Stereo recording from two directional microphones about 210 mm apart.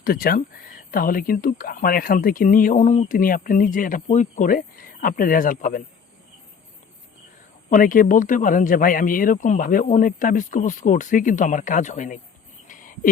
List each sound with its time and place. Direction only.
0.0 s speech: 45° left (ahead or behind)
7.7 s speech: 40° left (ahead or behind)
12.6 s a sound: 40° left (ahead or behind)